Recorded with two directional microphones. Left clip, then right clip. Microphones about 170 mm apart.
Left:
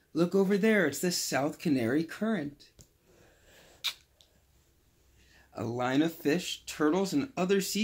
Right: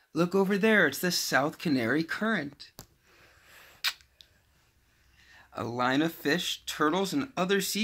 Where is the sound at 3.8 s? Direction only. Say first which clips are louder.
Right 4 dB; 5° right (ahead or behind).